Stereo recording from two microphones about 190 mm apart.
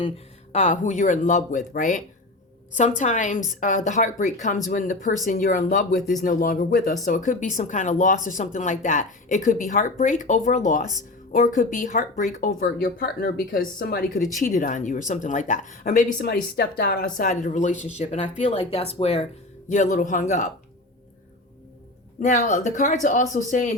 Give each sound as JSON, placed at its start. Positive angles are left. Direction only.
{"t": 0.5, "sound": "speech", "side_deg": 40}
{"t": 16.2, "sound": "speech", "side_deg": 55}
{"t": 22.2, "sound": "speech", "side_deg": 40}